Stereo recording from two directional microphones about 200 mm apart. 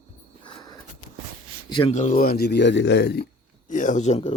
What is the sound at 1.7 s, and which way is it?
Speech, 30° left (ahead or behind).